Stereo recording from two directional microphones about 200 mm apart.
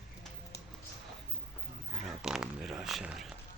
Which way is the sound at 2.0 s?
Centre (ahead or behind).